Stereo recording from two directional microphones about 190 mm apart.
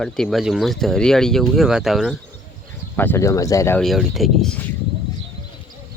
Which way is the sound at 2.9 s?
10° left (ahead or behind).